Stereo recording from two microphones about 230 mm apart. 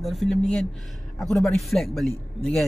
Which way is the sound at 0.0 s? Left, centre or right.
Centre.